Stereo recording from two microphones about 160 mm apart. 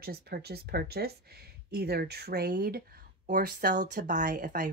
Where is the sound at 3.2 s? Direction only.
60° right (ahead or behind).